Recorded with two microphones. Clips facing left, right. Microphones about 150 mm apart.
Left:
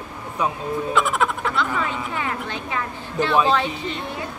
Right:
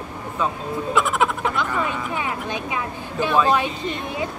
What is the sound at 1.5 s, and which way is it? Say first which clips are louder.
A woman's voice: even; 15° right (ahead or behind).